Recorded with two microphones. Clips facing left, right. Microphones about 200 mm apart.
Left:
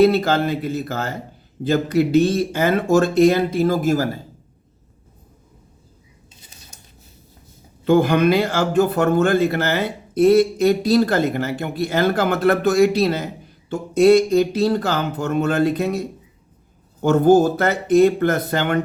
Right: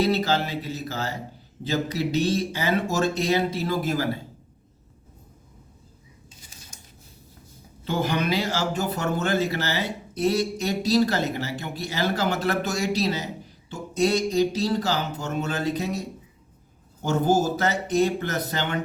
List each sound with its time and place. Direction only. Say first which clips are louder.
0.0 s speech: left 8 dB; 55° left (ahead or behind)
7.9 s a man's voice: left 10 dB; 55° left (ahead or behind)